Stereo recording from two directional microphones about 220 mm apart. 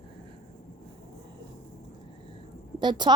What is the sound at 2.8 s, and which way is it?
Speech, 20° right (ahead or behind).